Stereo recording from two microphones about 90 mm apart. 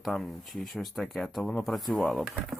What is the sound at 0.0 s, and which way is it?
Speech, 5° left (ahead or behind).